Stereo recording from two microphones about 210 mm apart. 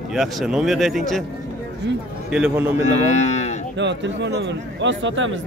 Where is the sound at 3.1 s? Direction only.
30° left (ahead or behind).